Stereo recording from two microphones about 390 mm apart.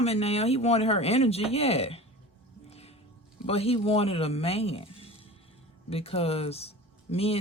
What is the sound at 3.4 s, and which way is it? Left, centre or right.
Speech, centre.